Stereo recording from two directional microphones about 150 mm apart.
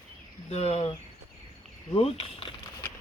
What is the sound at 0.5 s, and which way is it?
Speech, 45° left (ahead or behind).